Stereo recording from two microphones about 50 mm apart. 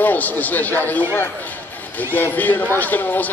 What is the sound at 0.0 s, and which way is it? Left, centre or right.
Speech, left.